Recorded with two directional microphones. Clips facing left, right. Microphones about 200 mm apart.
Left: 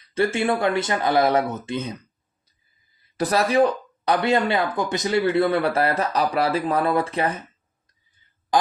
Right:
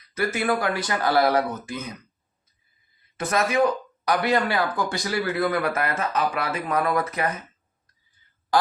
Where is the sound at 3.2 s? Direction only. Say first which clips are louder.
Left 3 dB; 35° left (ahead or behind).